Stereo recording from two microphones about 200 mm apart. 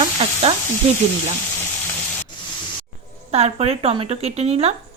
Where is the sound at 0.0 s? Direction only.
30° right (ahead or behind).